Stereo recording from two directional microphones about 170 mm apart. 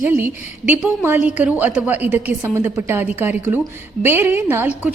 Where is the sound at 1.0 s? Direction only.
10° right (ahead or behind).